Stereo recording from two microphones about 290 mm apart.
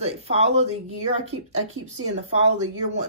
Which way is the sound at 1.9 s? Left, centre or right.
Right.